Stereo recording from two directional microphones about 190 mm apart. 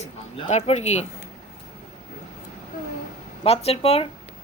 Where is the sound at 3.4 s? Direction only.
30° left (ahead or behind).